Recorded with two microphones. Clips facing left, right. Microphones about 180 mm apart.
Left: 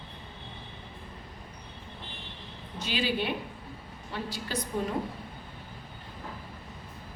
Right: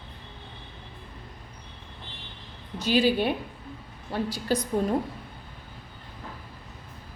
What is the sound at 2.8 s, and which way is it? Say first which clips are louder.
A woman's voice: right 8 dB; 40° right (ahead or behind).